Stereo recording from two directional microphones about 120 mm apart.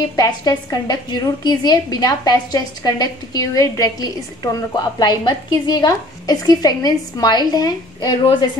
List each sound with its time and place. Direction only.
0.1 s a woman's voice: 30° left (ahead or behind)
8.2 s speech: 50° left (ahead or behind)